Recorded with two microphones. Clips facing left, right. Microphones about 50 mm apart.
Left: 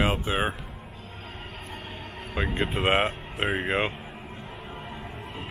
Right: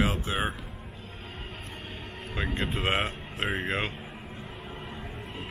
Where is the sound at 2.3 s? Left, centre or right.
Centre.